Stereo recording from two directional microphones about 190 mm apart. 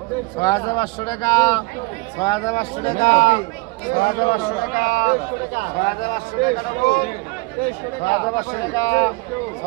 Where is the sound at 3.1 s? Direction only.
40° left (ahead or behind).